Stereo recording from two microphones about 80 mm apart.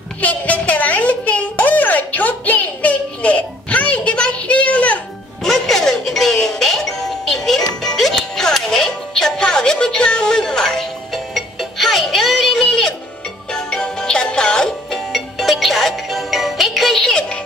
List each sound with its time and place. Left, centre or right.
0.2 s a child's voice: centre
5.4 s music: centre